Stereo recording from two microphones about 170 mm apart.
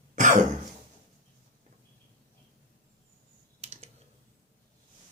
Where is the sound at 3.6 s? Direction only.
35° right (ahead or behind).